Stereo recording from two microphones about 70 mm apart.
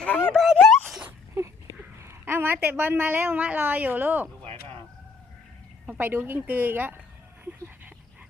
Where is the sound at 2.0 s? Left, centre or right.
Right.